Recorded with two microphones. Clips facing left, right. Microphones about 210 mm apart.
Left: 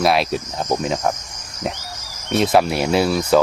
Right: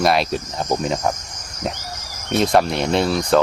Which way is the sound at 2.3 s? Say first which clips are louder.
Left 1 dB; centre (ahead or behind).